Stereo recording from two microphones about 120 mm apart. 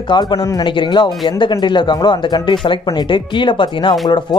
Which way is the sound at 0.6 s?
40° left (ahead or behind).